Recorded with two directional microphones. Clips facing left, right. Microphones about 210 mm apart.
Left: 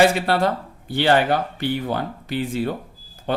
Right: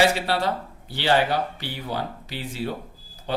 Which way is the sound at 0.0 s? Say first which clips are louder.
Left 4 dB; 55° left (ahead or behind).